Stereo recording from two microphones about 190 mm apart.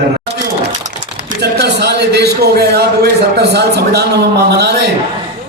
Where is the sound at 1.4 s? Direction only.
60° right (ahead or behind).